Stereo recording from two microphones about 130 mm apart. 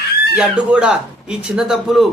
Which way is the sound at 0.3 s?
5° right (ahead or behind).